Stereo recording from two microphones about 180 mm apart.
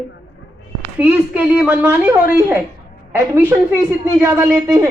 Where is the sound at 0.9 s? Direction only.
5° right (ahead or behind).